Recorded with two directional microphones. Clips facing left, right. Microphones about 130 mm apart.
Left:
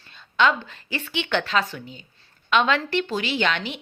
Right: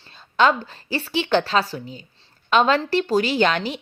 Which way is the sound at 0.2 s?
40° right (ahead or behind).